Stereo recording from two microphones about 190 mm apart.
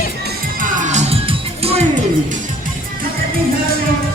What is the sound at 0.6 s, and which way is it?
Music, 40° right (ahead or behind).